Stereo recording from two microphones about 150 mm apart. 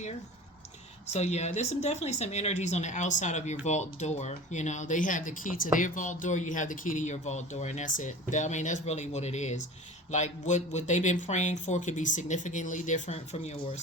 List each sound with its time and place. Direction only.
1.1 s speech: 50° left (ahead or behind)